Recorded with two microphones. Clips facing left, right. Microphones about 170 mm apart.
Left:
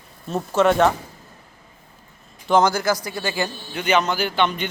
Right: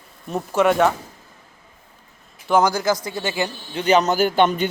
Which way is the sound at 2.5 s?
10° right (ahead or behind).